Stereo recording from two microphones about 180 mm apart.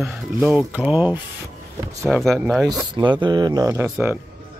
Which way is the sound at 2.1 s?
5° left (ahead or behind).